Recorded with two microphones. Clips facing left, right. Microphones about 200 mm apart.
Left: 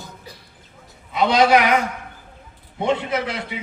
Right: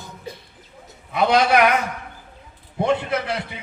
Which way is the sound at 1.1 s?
60° right (ahead or behind).